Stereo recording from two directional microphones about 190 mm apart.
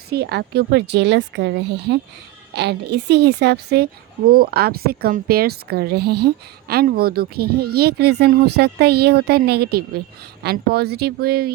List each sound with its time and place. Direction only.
0.1 s speech: 60° right (ahead or behind)